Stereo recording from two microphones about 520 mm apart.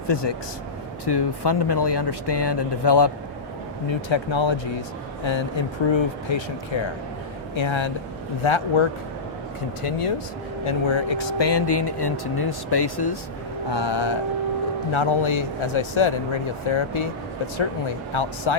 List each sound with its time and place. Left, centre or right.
0.1 s speech: left
7.5 s speech: left
9.8 s speech: left
10.7 s speech: left
18.1 s speech: left